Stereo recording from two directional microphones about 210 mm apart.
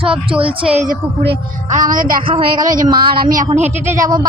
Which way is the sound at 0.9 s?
40° right (ahead or behind).